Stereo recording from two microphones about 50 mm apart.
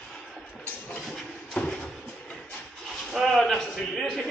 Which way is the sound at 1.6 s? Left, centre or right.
Left.